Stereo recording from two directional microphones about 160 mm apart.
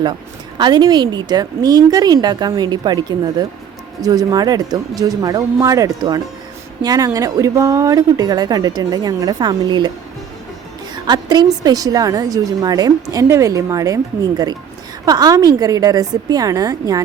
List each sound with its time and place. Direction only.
0.6 s a woman's voice: 25° right (ahead or behind)
10.9 s a woman's voice: 25° right (ahead or behind)